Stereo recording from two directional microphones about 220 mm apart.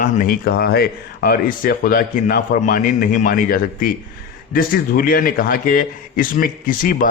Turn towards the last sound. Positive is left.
turn(degrees=40)  # may be behind; listen again after turning